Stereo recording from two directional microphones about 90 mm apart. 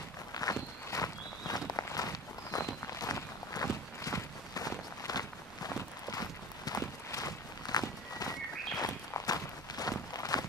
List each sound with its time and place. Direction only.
0.3 s walk: 40° left (ahead or behind)